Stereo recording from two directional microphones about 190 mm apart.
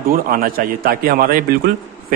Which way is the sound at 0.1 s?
50° right (ahead or behind).